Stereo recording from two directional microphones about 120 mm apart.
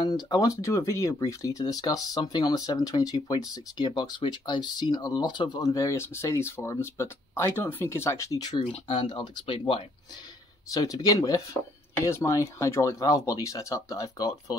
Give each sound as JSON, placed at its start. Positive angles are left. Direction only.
{"t": 0.0, "sound": "speech", "side_deg": 35}
{"t": 10.7, "sound": "speech", "side_deg": 30}